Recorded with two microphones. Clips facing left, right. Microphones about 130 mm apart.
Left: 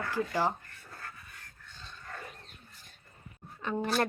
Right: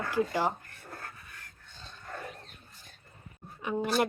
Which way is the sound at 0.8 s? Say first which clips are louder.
Right 3 dB; 45° right (ahead or behind).